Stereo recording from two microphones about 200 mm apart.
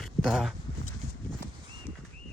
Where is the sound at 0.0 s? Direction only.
Centre (ahead or behind).